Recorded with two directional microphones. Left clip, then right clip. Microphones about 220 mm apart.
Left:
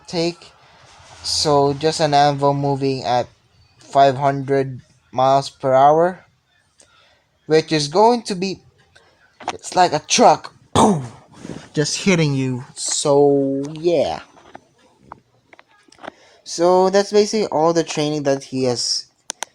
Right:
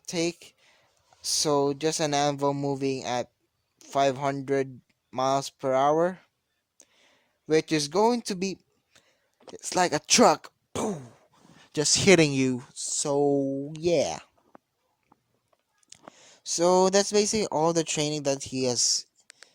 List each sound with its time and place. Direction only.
0.0 s speech: 50° right (ahead or behind)
7.4 s speech: 45° right (ahead or behind)
10.7 s a sound: 30° right (ahead or behind)
11.7 s speech: 50° right (ahead or behind)
15.9 s speech: 50° right (ahead or behind)